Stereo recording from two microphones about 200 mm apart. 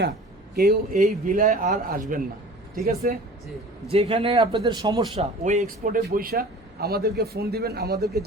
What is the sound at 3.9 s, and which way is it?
A man's voice, 30° right (ahead or behind).